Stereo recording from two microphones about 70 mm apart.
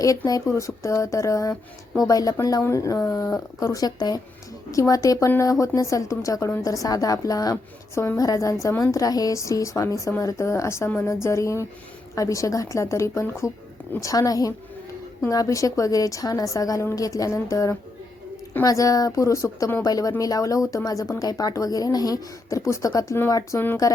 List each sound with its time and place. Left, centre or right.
0.4 s speech: left
2.6 s speech: left
4.7 s speech: left
7.5 s a woman's voice: left
8.2 s speech: left
14.0 s speech: left
19.8 s speech: left
23.5 s a woman's voice: left